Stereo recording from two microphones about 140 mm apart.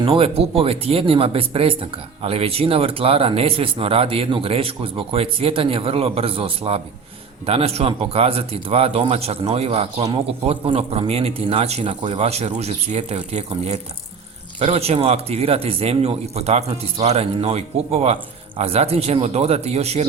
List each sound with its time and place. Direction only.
0.0 s speech: 40° right (ahead or behind)